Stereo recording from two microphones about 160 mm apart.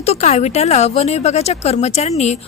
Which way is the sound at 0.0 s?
40° left (ahead or behind).